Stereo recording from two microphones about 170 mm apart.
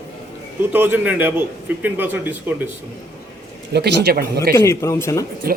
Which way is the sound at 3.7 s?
75° right (ahead or behind).